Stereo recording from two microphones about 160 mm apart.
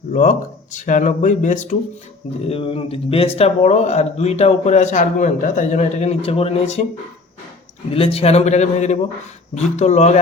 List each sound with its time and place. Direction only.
0.1 s a man's voice: 50° left (ahead or behind)
2.5 s a man's voice: 35° left (ahead or behind)
7.9 s a man's voice: 35° left (ahead or behind)